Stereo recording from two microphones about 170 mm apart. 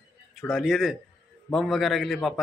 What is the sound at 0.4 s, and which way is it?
A man's voice, centre (ahead or behind).